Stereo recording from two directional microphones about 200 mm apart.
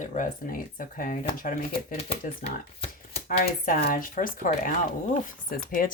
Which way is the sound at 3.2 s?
50° left (ahead or behind).